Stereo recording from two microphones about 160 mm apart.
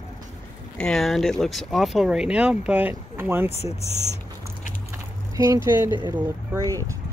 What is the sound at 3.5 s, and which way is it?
Speech, 40° left (ahead or behind).